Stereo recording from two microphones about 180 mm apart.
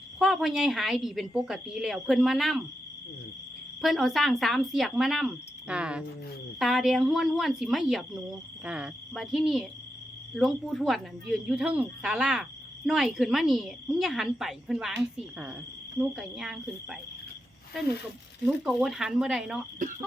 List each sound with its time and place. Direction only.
0.2 s speech: centre (ahead or behind)
3.8 s speech: centre (ahead or behind)
18.4 s speech: centre (ahead or behind)